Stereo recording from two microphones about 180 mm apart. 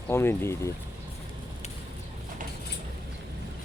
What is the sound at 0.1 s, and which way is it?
Speech, 15° left (ahead or behind).